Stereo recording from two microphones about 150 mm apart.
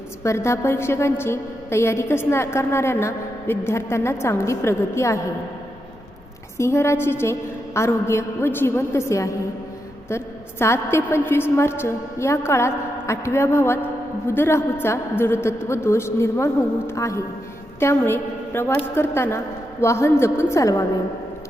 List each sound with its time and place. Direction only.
0.2 s a woman's voice: 20° left (ahead or behind)
6.6 s a woman's voice: 20° left (ahead or behind)